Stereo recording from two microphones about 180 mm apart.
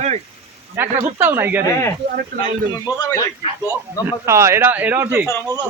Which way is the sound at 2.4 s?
20° left (ahead or behind).